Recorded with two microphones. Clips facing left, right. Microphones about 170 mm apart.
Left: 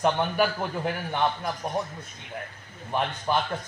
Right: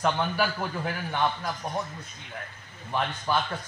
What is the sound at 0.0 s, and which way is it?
A man's voice, 20° left (ahead or behind).